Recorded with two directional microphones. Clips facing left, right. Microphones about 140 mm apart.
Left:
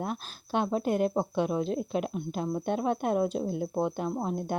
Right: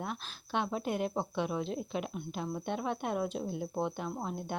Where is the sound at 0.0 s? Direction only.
45° left (ahead or behind).